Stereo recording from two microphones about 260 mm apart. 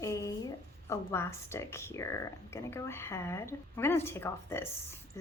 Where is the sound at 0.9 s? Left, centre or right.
Centre.